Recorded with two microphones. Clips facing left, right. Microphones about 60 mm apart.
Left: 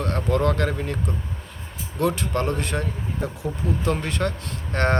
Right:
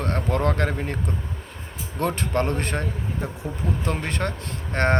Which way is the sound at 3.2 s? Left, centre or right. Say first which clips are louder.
Left 4 dB; right.